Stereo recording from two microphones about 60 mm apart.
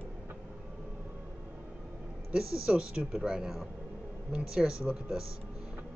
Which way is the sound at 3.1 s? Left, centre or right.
Centre.